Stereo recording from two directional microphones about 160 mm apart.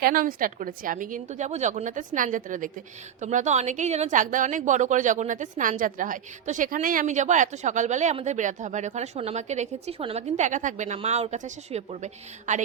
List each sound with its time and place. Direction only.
0.0 s a woman's voice: 60° right (ahead or behind)